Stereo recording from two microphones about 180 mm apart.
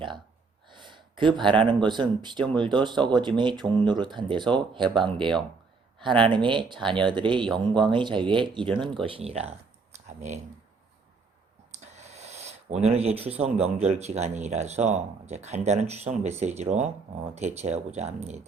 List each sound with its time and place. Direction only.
0.7 s a sound: 25° right (ahead or behind)
1.6 s speech: 25° right (ahead or behind)
11.9 s speech: 35° right (ahead or behind)